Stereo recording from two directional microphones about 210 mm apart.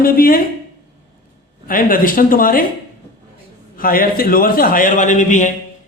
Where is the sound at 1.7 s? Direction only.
40° left (ahead or behind).